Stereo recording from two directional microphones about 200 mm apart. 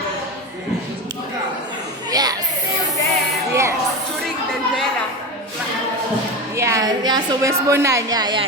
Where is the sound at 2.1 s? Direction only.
20° right (ahead or behind).